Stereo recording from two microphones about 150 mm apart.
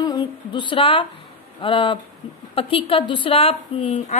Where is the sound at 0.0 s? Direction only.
30° left (ahead or behind).